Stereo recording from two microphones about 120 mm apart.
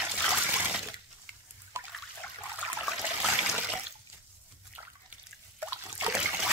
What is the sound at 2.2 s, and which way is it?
Trickle, 15° left (ahead or behind).